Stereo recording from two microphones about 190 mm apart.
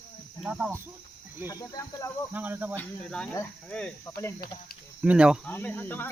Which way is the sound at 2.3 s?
10° right (ahead or behind).